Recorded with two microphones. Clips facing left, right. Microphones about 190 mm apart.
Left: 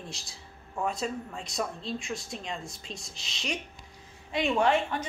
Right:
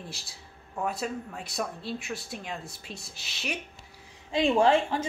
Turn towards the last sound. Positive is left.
turn(degrees=-30)  # may be behind; listen again after turning